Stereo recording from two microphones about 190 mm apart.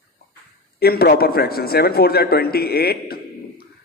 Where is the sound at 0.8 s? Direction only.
55° left (ahead or behind).